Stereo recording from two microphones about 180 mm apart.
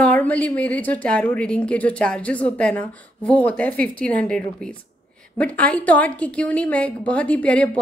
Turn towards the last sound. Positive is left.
turn(degrees=5)  # may be behind; listen again after turning